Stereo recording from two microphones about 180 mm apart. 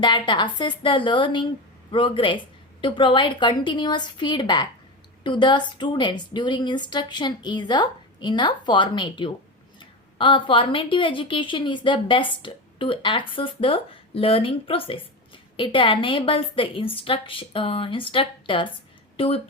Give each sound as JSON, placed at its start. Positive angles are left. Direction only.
{"t": 0.0, "sound": "a woman's voice", "side_deg": 25}